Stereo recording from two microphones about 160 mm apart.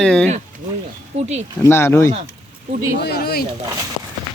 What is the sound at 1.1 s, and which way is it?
Speech, 45° right (ahead or behind).